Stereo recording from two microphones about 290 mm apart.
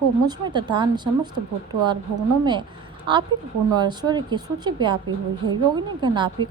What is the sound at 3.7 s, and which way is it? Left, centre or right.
A woman's voice, centre.